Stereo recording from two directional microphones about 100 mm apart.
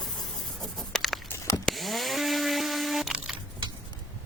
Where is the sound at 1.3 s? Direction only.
30° left (ahead or behind).